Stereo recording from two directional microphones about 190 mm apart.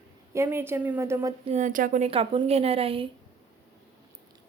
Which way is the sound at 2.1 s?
30° right (ahead or behind).